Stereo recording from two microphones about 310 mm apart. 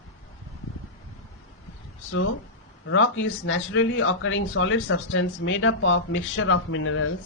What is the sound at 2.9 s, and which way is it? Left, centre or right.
Speech, left.